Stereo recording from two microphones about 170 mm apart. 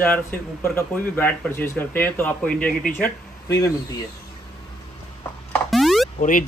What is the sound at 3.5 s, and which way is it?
Speech, 20° left (ahead or behind).